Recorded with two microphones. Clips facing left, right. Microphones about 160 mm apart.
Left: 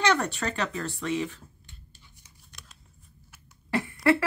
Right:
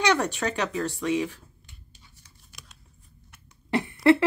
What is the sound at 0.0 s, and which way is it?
Speech, 10° right (ahead or behind).